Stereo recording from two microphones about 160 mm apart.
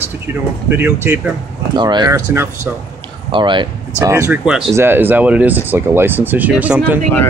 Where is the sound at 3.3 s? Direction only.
30° right (ahead or behind).